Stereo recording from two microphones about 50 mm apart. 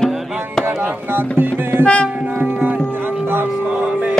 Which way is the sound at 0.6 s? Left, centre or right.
Right.